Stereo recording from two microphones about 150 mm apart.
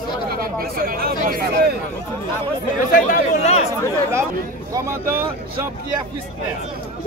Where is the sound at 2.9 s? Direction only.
65° left (ahead or behind); by 3.7 s 50° left (ahead or behind).